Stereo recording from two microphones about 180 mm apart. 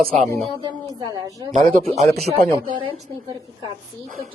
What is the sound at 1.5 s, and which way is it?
Speech, 45° right (ahead or behind).